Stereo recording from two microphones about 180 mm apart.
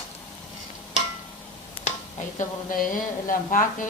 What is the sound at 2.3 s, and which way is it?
A woman's voice, 50° left (ahead or behind).